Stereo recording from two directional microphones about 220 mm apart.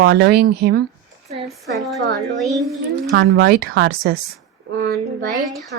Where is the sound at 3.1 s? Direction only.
50° right (ahead or behind).